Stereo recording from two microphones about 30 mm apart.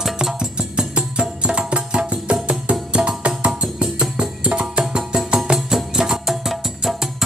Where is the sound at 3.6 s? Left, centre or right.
Right.